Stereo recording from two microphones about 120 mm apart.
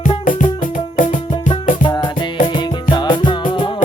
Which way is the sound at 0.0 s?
90° left.